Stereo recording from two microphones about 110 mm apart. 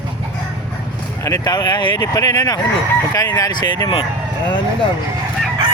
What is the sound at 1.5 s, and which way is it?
Speech, 40° left (ahead or behind).